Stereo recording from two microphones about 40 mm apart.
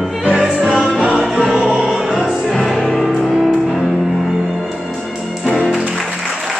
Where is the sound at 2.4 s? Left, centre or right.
Centre.